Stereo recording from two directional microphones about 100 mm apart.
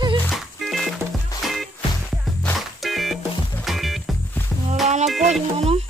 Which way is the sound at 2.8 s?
Centre (ahead or behind).